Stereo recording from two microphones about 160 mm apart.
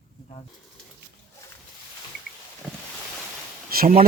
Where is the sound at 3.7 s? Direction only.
65° right (ahead or behind).